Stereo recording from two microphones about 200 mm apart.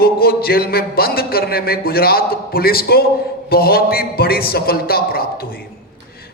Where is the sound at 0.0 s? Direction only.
50° left (ahead or behind).